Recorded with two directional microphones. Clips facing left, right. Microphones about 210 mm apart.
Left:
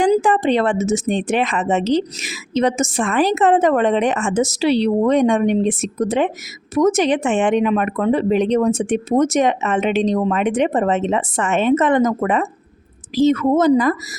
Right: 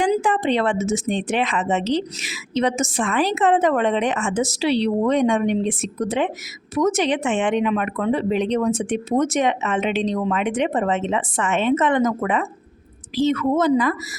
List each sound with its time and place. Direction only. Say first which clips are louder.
0.0 s a woman's voice: left 4 dB; 40° left (ahead or behind)